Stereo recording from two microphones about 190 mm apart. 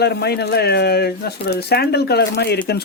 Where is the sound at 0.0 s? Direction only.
60° left (ahead or behind).